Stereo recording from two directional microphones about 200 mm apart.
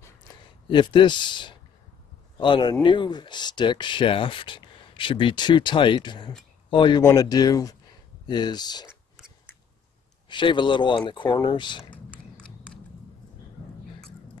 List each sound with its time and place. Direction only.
0.7 s speech: 25° left (ahead or behind)
8.8 s a sound: 5° right (ahead or behind)
10.2 s speech: 25° left (ahead or behind)